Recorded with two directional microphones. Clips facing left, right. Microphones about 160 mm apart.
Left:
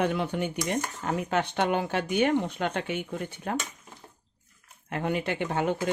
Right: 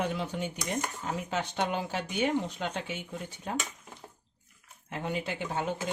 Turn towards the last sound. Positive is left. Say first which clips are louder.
# left 5 dB
turn(degrees=60)  # may be behind; listen again after turning